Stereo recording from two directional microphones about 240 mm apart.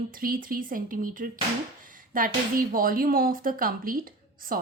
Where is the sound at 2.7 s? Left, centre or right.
Right.